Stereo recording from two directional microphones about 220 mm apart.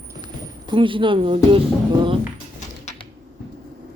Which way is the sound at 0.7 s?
20° right (ahead or behind).